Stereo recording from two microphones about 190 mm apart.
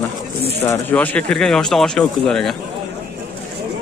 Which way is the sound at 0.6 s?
10° left (ahead or behind).